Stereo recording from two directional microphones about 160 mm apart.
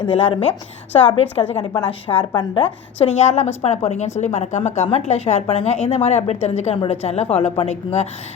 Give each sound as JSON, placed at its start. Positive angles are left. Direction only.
{"t": 0.0, "sound": "a woman's voice", "side_deg": 35}
{"t": 1.8, "sound": "a woman's voice", "side_deg": 15}
{"t": 2.3, "sound": "a woman's voice", "side_deg": 30}
{"t": 3.0, "sound": "a woman's voice", "side_deg": 45}